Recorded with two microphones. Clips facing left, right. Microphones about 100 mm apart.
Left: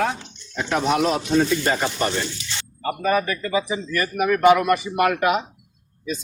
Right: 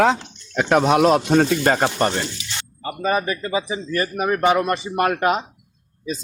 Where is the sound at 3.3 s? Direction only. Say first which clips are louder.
Even; 25° right (ahead or behind).